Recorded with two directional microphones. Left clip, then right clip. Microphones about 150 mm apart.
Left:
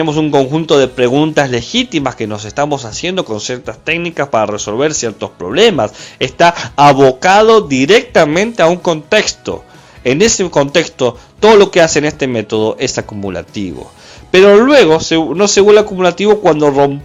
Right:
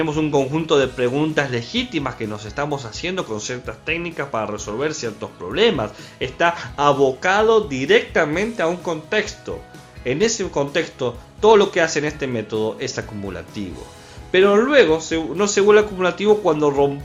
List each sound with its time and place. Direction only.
0.0 s a man's voice: 40° left (ahead or behind)
0.9 s speech: 50° left (ahead or behind)
6.1 s a man's voice: 70° left (ahead or behind)
15.4 s speech: 50° left (ahead or behind)